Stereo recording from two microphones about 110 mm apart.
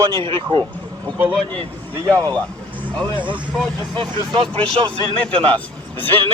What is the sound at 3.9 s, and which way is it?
Speech, 50° right (ahead or behind).